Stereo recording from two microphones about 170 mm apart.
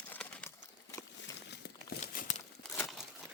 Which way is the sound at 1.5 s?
70° left (ahead or behind).